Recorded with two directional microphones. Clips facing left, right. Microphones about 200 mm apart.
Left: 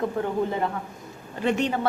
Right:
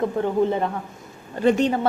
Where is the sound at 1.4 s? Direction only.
35° right (ahead or behind).